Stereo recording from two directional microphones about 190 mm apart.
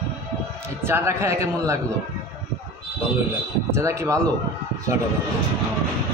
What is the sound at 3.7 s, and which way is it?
Speech, 15° right (ahead or behind).